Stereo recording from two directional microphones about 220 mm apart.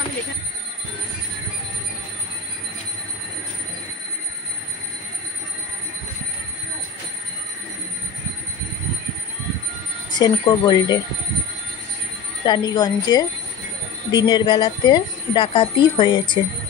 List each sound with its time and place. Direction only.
10.1 s speech: 20° left (ahead or behind)
12.4 s a woman's voice: 20° left (ahead or behind)
14.2 s speech: 25° left (ahead or behind)